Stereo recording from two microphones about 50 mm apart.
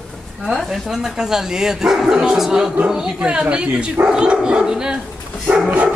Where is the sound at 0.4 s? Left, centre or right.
Centre.